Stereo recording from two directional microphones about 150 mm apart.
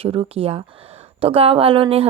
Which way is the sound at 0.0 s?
40° right (ahead or behind).